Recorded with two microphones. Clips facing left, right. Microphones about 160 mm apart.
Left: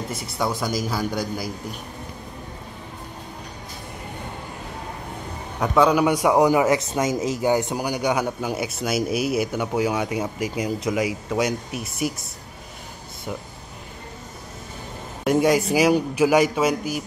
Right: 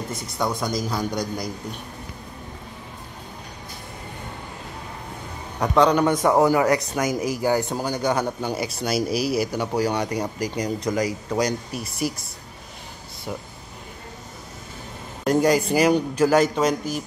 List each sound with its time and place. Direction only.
0.1 s speech: 5° left (ahead or behind)
5.6 s a man's voice: 5° left (ahead or behind)
9.1 s speech: 55° left (ahead or behind)
9.4 s speech: centre (ahead or behind)
15.2 s a man's voice: 5° left (ahead or behind)